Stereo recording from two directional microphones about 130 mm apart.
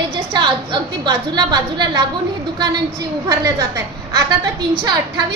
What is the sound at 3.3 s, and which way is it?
Speech, 30° right (ahead or behind).